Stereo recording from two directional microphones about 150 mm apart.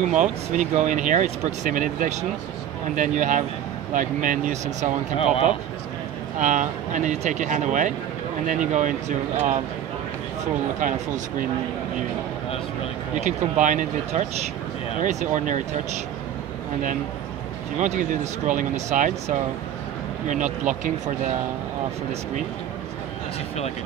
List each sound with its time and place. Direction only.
0.1 s speech: 55° right (ahead or behind)
5.1 s speech: 40° left (ahead or behind)
6.4 s speech: 55° right (ahead or behind)
10.8 s speech: 60° right (ahead or behind)
13.1 s speech: 50° right (ahead or behind)
17.7 s speech: 55° right (ahead or behind)